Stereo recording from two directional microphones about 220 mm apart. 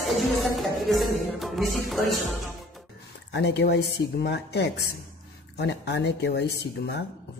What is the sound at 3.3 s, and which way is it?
Mantra, 50° left (ahead or behind).